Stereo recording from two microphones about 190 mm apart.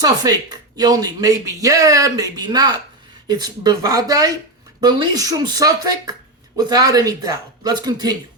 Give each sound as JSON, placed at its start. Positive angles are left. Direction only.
{"t": 0.0, "sound": "speech", "side_deg": -20}